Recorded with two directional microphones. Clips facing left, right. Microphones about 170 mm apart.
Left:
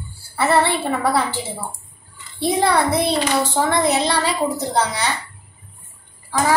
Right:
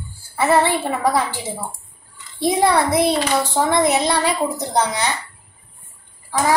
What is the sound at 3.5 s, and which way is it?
Speech, 15° right (ahead or behind).